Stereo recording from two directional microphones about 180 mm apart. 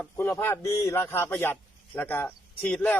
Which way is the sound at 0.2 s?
15° left (ahead or behind).